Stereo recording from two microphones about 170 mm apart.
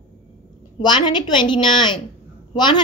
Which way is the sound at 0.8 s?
25° left (ahead or behind).